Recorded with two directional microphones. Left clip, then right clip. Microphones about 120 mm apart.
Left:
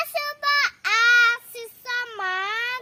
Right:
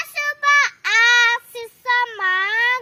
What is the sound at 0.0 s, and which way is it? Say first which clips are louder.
Child singing: right 5 dB; 40° left (ahead or behind).